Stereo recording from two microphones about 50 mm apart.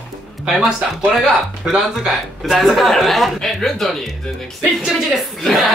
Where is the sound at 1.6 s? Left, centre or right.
Centre.